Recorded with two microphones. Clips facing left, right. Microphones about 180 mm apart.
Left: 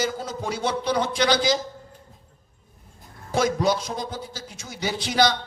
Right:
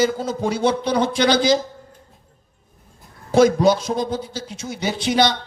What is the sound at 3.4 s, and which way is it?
A man's voice, 25° right (ahead or behind).